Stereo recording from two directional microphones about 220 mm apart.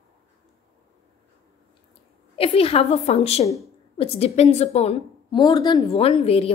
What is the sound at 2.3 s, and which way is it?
A woman's voice, 25° left (ahead or behind).